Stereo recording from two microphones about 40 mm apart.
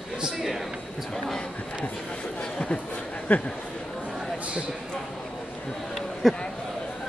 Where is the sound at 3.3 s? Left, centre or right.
Left.